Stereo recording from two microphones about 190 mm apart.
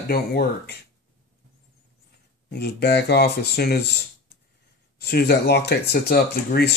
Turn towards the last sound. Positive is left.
turn(degrees=55)  # may be behind; listen again after turning